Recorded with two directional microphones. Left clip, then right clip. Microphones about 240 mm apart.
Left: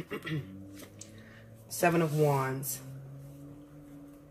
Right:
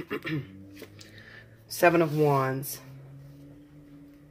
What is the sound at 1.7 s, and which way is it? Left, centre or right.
Speech, right.